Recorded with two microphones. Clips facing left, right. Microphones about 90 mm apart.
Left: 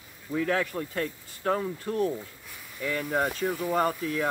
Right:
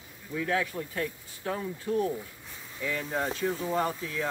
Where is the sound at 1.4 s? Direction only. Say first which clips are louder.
Left 5 dB; 60° left (ahead or behind).